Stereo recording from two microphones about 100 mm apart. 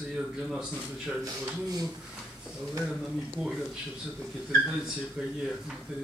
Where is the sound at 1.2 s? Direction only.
35° right (ahead or behind).